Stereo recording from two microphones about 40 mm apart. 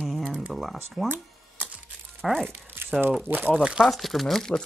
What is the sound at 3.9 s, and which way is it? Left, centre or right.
Speech, centre.